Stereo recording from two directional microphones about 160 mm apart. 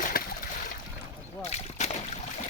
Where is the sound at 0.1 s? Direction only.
65° left (ahead or behind).